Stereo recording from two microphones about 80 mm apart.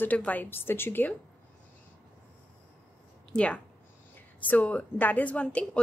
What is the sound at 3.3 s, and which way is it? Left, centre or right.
Speech, centre.